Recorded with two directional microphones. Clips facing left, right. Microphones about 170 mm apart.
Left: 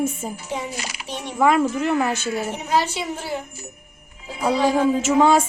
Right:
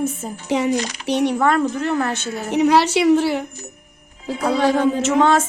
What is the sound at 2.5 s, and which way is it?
Speech, 75° right (ahead or behind).